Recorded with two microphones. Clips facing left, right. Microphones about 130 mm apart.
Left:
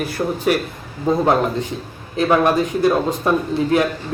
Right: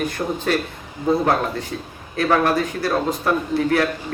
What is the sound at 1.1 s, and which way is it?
A man's voice, 20° left (ahead or behind).